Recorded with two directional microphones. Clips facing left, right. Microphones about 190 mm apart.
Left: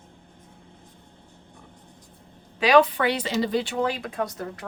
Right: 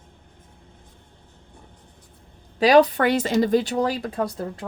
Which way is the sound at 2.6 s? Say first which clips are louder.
Right 3 dB; 40° right (ahead or behind).